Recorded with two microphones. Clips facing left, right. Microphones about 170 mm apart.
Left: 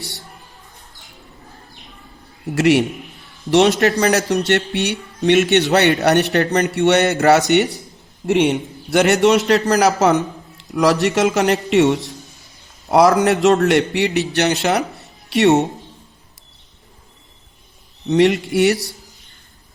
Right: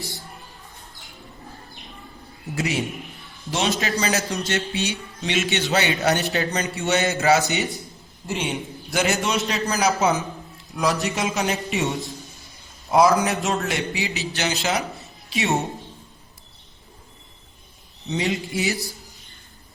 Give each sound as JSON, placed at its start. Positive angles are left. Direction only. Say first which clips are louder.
{"t": 2.6, "sound": "a man's voice", "louder": "left 11 dB", "side_deg": 75}
{"t": 15.0, "sound": "a sound", "louder": "left 11 dB", "side_deg": 70}
{"t": 18.1, "sound": "a man's voice", "louder": "left 11 dB", "side_deg": 70}